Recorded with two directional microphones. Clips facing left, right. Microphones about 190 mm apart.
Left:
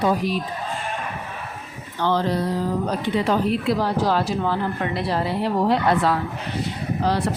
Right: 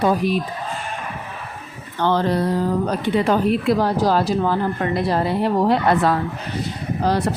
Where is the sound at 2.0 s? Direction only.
55° right (ahead or behind).